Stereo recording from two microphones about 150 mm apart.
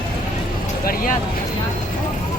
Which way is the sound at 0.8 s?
70° left (ahead or behind).